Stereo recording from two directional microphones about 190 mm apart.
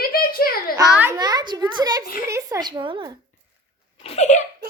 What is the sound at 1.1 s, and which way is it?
A child's voice, 20° right (ahead or behind).